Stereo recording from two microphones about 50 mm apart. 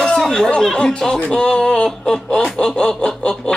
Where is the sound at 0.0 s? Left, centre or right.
Centre.